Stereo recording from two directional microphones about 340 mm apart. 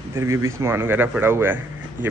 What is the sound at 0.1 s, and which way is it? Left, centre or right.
Speech, centre.